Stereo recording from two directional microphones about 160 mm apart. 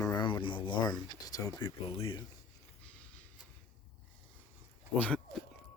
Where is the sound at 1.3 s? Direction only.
25° left (ahead or behind).